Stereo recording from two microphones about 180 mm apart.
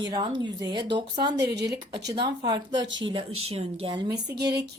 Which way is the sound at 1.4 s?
70° right (ahead or behind).